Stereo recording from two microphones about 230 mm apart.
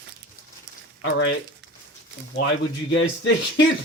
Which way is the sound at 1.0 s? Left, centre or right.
Left.